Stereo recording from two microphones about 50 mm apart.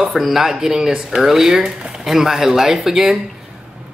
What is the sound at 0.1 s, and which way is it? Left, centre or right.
Speech, centre.